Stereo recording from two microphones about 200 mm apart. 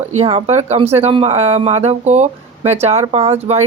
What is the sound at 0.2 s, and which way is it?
A woman's voice, 30° right (ahead or behind).